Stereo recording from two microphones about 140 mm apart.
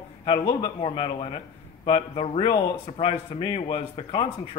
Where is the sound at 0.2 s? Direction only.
35° left (ahead or behind).